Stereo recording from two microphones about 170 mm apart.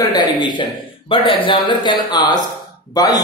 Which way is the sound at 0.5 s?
30° left (ahead or behind).